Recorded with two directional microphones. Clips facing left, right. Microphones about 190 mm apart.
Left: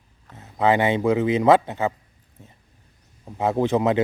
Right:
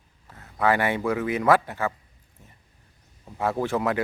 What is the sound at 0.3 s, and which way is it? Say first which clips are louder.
Speech: left 3 dB; 20° left (ahead or behind).